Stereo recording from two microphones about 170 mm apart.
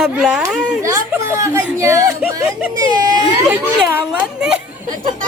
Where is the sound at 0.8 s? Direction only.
15° right (ahead or behind).